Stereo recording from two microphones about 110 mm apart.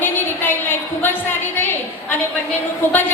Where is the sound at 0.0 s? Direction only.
20° left (ahead or behind).